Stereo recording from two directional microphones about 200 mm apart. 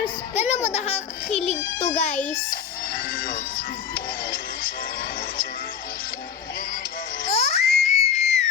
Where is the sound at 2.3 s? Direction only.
45° left (ahead or behind).